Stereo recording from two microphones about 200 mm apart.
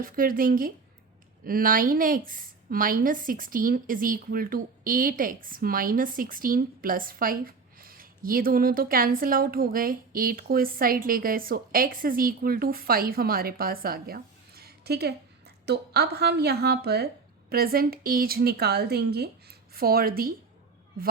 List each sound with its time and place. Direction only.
0.0 s a woman's voice: 45° right (ahead or behind)